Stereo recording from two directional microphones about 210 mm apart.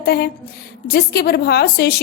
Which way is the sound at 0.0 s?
50° left (ahead or behind).